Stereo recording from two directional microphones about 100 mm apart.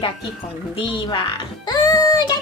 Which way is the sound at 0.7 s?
55° left (ahead or behind).